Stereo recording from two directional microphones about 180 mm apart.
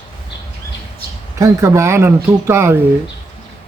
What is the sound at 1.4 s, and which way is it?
Speech, 15° right (ahead or behind).